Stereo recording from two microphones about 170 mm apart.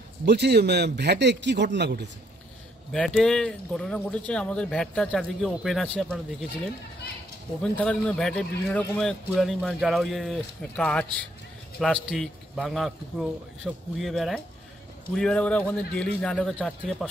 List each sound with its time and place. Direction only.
0.2 s a man's voice: 75° right (ahead or behind)
2.9 s speech: 5° left (ahead or behind)
7.6 s speech: 5° left (ahead or behind)